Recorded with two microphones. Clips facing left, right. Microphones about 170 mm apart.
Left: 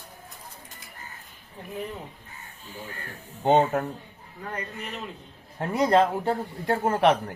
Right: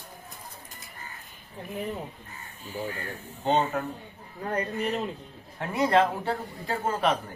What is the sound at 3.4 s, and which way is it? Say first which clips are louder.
Speech: left 5 dB; 60° left (ahead or behind).